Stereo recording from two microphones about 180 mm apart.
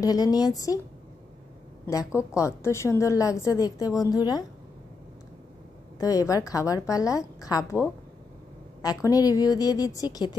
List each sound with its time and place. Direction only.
0.0 s a woman's voice: 20° left (ahead or behind)
1.9 s a woman's voice: 15° left (ahead or behind)
5.9 s a woman's voice: 20° left (ahead or behind)
8.8 s a woman's voice: 20° left (ahead or behind)